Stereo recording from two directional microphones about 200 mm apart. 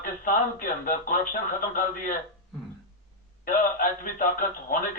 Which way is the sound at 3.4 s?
45° left (ahead or behind).